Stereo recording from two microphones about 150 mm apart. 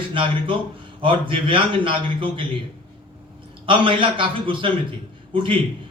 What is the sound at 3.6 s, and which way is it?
A man's voice, 35° right (ahead or behind).